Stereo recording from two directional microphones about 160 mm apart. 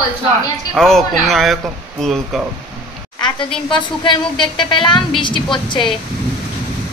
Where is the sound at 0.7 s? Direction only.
Centre (ahead or behind).